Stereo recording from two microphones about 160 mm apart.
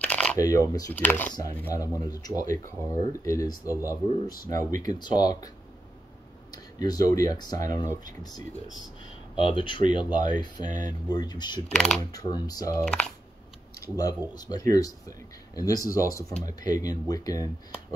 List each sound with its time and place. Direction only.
0.0 s shuffling cards: 5° left (ahead or behind)
0.4 s speech: 20° left (ahead or behind)
0.9 s speech: 10° left (ahead or behind)
4.6 s speech: 55° right (ahead or behind)
4.8 s speech: 25° left (ahead or behind)
6.5 s speech: 25° left (ahead or behind)
9.5 s speech: 30° left (ahead or behind)
10.6 s speech: 50° right (ahead or behind)
10.9 s speech: 25° left (ahead or behind)
11.7 s speech: 5° left (ahead or behind)
12.0 s speech: 25° left (ahead or behind)
13.7 s speech: 20° left (ahead or behind)